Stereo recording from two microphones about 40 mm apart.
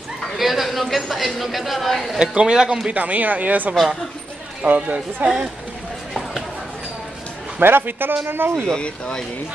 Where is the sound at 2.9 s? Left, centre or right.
Right.